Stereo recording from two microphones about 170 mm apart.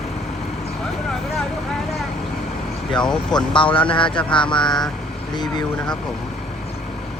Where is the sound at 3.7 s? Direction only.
30° left (ahead or behind).